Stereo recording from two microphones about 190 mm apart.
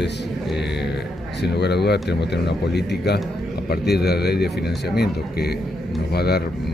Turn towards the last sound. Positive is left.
turn(degrees=60)  # may be behind; listen again after turning